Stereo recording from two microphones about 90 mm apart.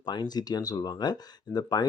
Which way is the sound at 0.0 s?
55° left (ahead or behind).